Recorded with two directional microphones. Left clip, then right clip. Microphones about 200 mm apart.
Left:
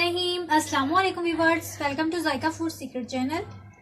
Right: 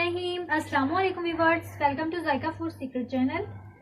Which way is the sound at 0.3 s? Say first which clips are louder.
Left 4 dB; 55° left (ahead or behind).